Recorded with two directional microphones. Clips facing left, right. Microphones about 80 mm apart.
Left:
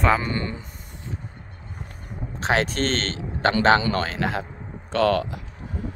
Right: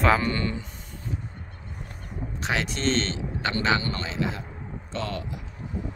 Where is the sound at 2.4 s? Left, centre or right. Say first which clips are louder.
Left 5 dB; left.